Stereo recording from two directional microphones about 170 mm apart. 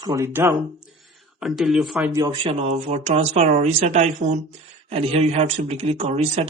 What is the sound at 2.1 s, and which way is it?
A man's voice, 30° right (ahead or behind).